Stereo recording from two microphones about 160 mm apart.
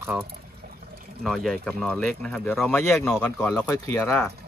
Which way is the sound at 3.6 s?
20° left (ahead or behind).